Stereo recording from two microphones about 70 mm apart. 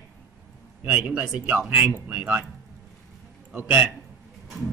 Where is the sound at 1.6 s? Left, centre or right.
Centre.